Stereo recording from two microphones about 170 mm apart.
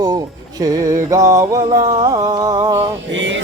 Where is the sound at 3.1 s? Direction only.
90° right.